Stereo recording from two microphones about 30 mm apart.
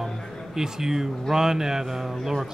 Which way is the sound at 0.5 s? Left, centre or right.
Centre.